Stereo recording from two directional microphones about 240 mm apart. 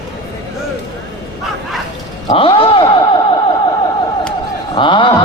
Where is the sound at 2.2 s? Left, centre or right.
Left.